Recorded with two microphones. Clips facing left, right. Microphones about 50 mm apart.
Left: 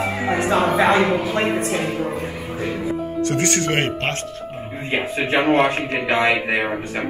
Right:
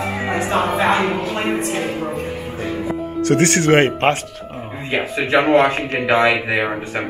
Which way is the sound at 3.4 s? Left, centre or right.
Right.